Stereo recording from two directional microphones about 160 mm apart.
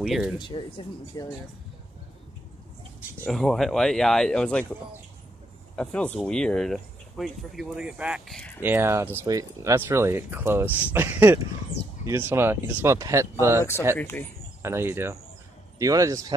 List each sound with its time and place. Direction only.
0.0 s speech: 5° right (ahead or behind)
0.4 s speech: 30° left (ahead or behind)
3.3 s speech: centre (ahead or behind)
5.8 s speech: 5° left (ahead or behind); by 13.7 s 15° right (ahead or behind)
13.9 s speech: 10° left (ahead or behind)
14.6 s a man's voice: 15° right (ahead or behind)